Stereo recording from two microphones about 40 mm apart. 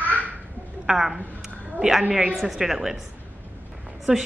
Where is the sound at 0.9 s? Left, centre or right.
Centre.